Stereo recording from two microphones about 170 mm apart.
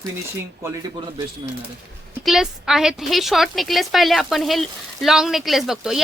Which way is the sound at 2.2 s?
5° right (ahead or behind).